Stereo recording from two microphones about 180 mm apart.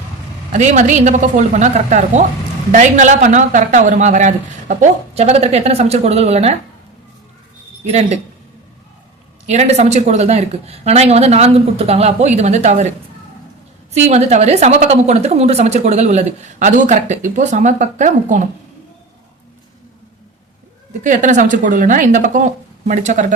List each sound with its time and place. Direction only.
0.5 s a woman's voice: 40° right (ahead or behind)
7.9 s a woman's voice: 35° right (ahead or behind)
9.5 s a woman's voice: 35° right (ahead or behind)
13.9 s a woman's voice: 40° right (ahead or behind)
21.0 s a woman's voice: 45° right (ahead or behind)